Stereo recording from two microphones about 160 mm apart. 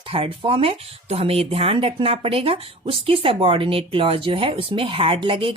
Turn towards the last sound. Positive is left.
turn(degrees=-35)  # may be behind; listen again after turning